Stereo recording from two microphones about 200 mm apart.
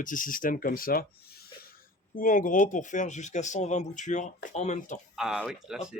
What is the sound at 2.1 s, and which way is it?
Speech, 40° left (ahead or behind).